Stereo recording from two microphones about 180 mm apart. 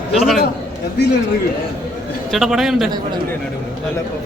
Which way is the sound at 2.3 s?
Centre (ahead or behind).